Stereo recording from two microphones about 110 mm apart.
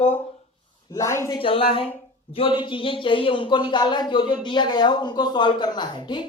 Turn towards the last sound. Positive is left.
turn(degrees=45)  # may be behind; listen again after turning